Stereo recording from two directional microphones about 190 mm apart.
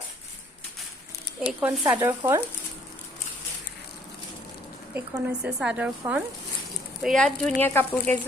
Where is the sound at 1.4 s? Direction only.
10° right (ahead or behind).